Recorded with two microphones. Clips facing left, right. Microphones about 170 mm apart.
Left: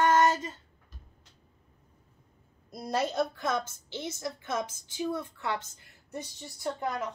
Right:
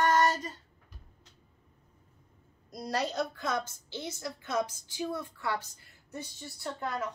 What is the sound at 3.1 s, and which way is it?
A woman's voice, 20° left (ahead or behind).